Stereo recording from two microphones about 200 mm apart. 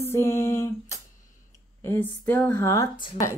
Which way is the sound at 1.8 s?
10° left (ahead or behind).